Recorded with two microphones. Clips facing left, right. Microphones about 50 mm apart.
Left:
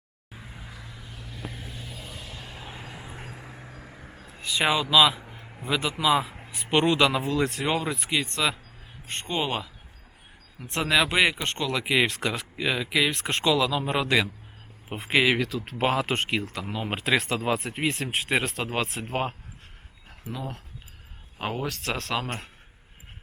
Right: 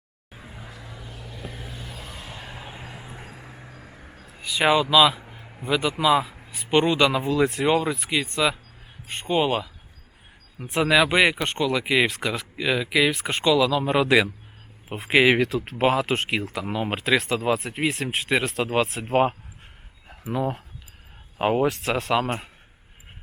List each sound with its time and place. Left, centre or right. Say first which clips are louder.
0.3 s vehicle: right 2 dB; centre
2.2 s vehicle: right 3 dB; centre
6.5 s speech: right 2 dB; centre
10.7 s speech: right 4 dB; centre
16.6 s speech: right 5 dB; centre
16.9 s speech: right 2 dB; centre
21.3 s speech: right 9 dB; centre
21.7 s speech: right 6 dB; centre